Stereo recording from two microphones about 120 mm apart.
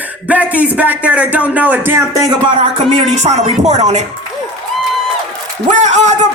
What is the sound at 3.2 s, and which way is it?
Speech, 70° right (ahead or behind).